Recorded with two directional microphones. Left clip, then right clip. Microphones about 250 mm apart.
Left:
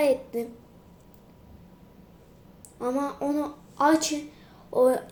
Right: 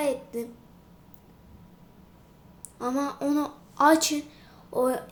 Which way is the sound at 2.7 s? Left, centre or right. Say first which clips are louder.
Left 1 dB; centre.